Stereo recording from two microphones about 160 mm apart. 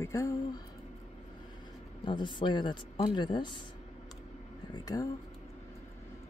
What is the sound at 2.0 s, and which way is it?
Speech, 30° left (ahead or behind).